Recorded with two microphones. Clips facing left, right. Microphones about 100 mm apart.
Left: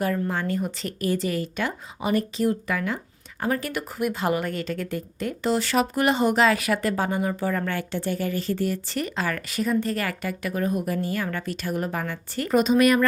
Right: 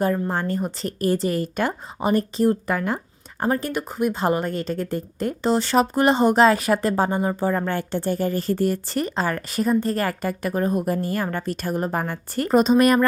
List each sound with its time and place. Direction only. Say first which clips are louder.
0.0 s a woman's voice: right 3 dB; 35° right (ahead or behind)
3.4 s a woman's voice: right 3 dB; 30° right (ahead or behind)